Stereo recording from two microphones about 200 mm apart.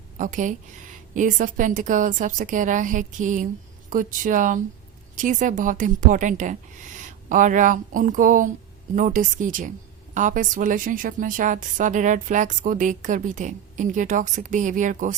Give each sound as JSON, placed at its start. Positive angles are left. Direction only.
{"t": 0.2, "sound": "a woman's voice", "side_deg": -40}